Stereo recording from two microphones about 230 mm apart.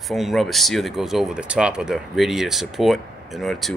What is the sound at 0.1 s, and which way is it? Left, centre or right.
Speech, centre.